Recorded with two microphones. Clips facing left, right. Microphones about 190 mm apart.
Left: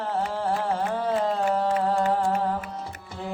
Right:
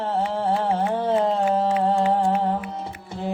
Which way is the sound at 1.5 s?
25° right (ahead or behind).